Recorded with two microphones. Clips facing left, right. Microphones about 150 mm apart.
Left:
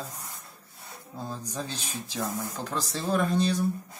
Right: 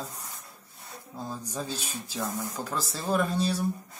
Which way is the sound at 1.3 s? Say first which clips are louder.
Right 1 dB; 10° right (ahead or behind).